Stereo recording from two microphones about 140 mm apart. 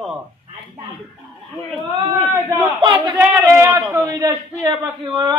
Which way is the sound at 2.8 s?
30° right (ahead or behind).